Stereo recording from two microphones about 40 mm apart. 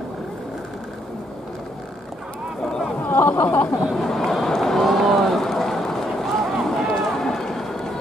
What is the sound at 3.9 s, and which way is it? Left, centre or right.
Run, centre.